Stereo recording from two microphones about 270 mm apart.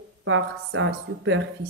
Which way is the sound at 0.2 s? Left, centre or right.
Right.